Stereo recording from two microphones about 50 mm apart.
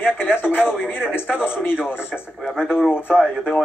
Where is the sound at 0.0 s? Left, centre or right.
Left.